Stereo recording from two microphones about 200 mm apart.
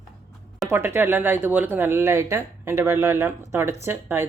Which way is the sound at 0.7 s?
10° right (ahead or behind).